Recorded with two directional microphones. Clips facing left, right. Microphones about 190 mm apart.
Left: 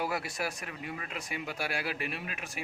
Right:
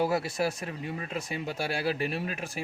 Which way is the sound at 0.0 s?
30° right (ahead or behind).